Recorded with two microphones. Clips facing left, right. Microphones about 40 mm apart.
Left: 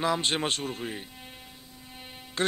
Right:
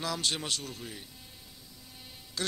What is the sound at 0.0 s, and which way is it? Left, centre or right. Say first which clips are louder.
Speech: left 7 dB; left.